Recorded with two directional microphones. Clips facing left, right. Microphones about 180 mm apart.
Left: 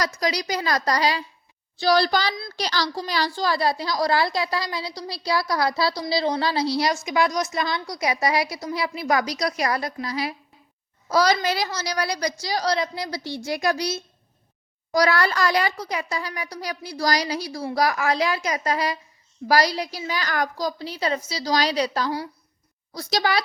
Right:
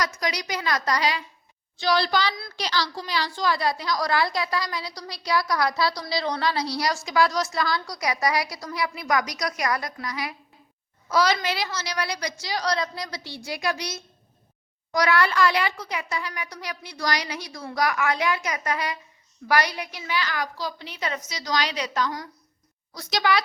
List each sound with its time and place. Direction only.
0.0 s a woman's voice: 35° left (ahead or behind)